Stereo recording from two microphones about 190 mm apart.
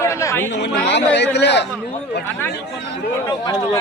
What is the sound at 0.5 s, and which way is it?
Speech, 65° left (ahead or behind).